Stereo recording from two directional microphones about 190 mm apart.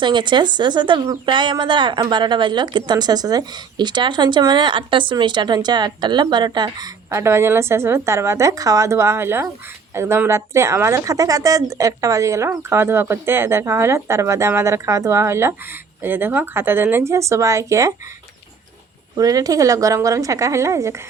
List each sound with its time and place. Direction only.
0.0 s speech: 25° right (ahead or behind)
19.1 s speech: 20° right (ahead or behind)